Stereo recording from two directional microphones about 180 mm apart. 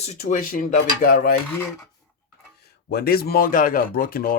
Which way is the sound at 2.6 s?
60° left (ahead or behind).